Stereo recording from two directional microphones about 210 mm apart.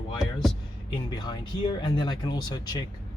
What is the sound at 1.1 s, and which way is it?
Speech, 20° left (ahead or behind).